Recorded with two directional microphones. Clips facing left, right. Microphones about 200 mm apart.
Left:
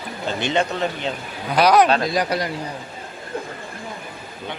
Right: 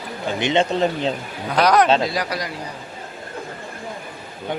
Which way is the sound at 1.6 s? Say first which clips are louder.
Left 1 dB; 5° left (ahead or behind).